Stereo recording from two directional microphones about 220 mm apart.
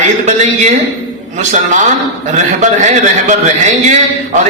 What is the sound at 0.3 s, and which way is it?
Speech, 30° right (ahead or behind).